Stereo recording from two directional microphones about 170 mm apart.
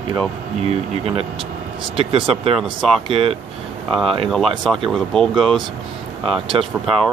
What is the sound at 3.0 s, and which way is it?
Speech, 35° right (ahead or behind).